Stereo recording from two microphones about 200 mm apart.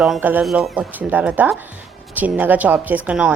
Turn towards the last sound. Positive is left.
turn(degrees=-5)  # may be behind; listen again after turning